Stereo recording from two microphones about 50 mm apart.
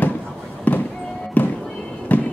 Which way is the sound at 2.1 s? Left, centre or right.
Left.